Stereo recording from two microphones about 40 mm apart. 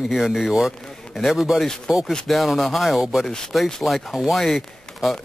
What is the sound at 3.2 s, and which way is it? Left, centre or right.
Speech, centre.